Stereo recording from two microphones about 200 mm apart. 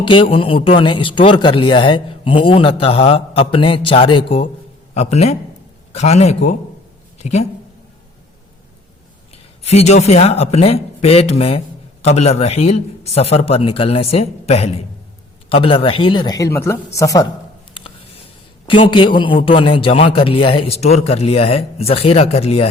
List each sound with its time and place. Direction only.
0.0 s a man's voice: 25° left (ahead or behind)
9.3 s a man's voice: 30° left (ahead or behind); by 17.2 s 15° left (ahead or behind)
18.6 s a man's voice: 25° left (ahead or behind)